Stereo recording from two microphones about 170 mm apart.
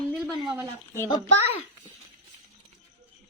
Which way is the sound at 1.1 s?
35° left (ahead or behind).